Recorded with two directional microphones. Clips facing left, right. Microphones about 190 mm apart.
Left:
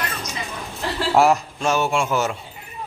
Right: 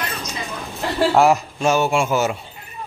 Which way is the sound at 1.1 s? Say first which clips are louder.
Left 1 dB; 5° right (ahead or behind).